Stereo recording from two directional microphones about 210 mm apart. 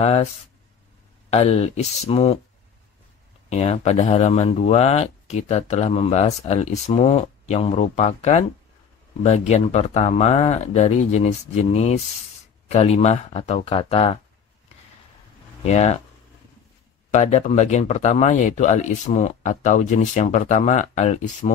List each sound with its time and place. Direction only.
0.0 s speech: 30° left (ahead or behind)
1.3 s speech: 30° left (ahead or behind)
3.4 s speech: 30° left (ahead or behind)
15.6 s speech: 30° left (ahead or behind)
17.1 s speech: 35° left (ahead or behind)